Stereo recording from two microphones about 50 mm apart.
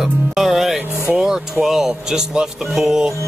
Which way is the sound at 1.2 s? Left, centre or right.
Centre.